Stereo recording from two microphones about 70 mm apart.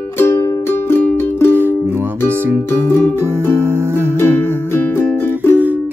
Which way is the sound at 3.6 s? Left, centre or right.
Right.